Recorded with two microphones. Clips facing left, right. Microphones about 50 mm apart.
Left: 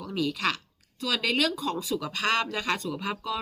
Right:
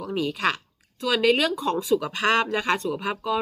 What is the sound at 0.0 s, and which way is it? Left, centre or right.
Speech, right.